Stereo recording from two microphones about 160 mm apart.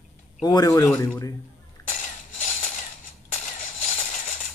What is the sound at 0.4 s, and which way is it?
Speech, 25° left (ahead or behind).